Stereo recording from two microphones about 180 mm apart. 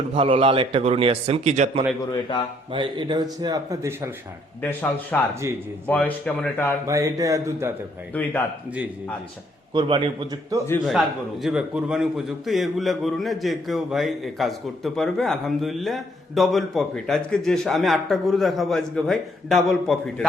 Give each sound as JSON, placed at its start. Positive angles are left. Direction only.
{"t": 0.2, "sound": "a man's voice", "side_deg": -30}
{"t": 2.7, "sound": "a man's voice", "side_deg": -25}
{"t": 4.6, "sound": "speech", "side_deg": 10}
{"t": 5.3, "sound": "speech", "side_deg": -15}
{"t": 5.9, "sound": "speech", "side_deg": 10}
{"t": 6.8, "sound": "speech", "side_deg": -15}
{"t": 8.1, "sound": "speech", "side_deg": 10}
{"t": 9.7, "sound": "a man's voice", "side_deg": -25}
{"t": 11.4, "sound": "a man's voice", "side_deg": -5}